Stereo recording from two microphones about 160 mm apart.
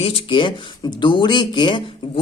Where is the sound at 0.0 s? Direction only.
35° left (ahead or behind).